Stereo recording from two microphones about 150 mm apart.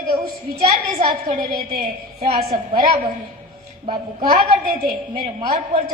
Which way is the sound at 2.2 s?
40° right (ahead or behind).